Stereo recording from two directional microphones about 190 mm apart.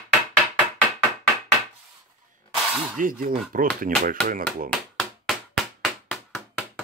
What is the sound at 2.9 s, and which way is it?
Speech, 45° right (ahead or behind).